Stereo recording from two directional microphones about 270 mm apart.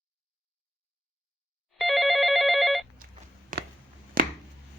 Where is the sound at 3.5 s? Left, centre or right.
Right.